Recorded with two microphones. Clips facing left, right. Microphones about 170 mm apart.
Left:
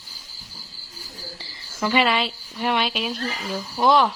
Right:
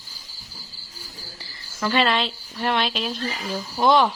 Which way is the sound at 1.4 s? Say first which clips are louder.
Left 2 dB; 20° left (ahead or behind).